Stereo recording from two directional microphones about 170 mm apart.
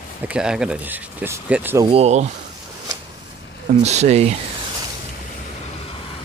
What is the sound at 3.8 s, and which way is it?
Speech, 40° right (ahead or behind).